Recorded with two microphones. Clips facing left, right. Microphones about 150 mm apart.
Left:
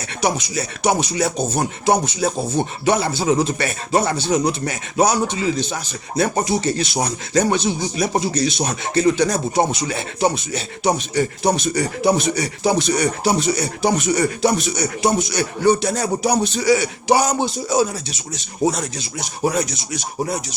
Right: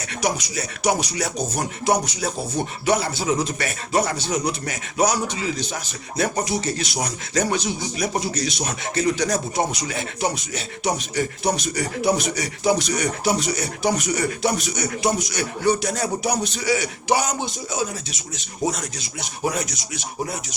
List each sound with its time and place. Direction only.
0.2 s speech: 25° left (ahead or behind)